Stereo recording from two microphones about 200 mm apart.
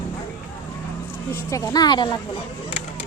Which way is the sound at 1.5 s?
20° left (ahead or behind).